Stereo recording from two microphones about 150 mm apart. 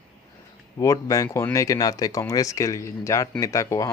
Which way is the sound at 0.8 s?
20° left (ahead or behind).